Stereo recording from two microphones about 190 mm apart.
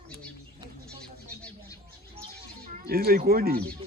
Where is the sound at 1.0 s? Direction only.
5° left (ahead or behind).